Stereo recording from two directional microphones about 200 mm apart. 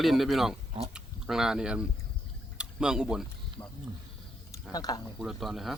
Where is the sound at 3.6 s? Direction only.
10° left (ahead or behind).